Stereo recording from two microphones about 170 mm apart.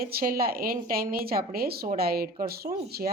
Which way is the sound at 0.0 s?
60° right (ahead or behind).